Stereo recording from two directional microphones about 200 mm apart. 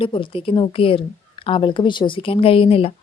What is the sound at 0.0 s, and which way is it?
A woman's voice, 25° left (ahead or behind).